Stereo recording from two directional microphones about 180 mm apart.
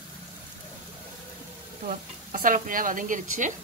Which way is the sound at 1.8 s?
50° right (ahead or behind).